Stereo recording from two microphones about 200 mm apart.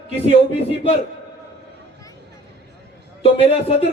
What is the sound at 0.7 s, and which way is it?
Speech, 30° left (ahead or behind).